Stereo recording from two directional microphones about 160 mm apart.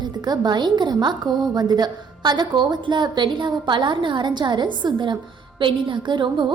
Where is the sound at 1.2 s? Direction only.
Centre (ahead or behind).